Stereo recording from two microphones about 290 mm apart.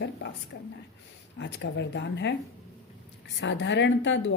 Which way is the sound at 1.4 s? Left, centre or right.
Left.